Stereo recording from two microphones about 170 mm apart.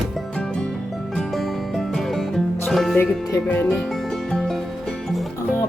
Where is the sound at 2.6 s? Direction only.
Centre (ahead or behind).